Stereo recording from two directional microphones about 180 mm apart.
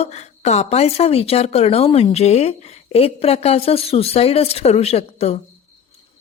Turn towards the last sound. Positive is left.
turn(degrees=35)  # may be behind; listen again after turning